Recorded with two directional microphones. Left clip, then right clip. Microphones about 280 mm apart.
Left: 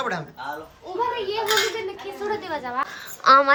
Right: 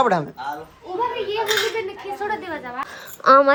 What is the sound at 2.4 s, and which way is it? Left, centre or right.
Speech, left.